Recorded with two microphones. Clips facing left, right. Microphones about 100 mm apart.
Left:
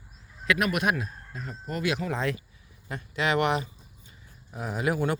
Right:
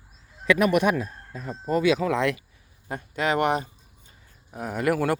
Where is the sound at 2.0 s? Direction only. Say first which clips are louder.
Right 6 dB; 85° right.